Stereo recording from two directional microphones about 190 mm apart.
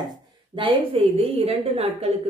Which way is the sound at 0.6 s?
30° right (ahead or behind).